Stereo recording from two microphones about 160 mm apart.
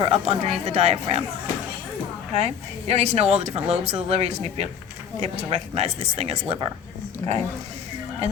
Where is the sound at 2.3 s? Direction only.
40° right (ahead or behind).